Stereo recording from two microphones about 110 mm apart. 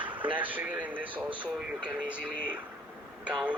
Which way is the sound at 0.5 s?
15° right (ahead or behind).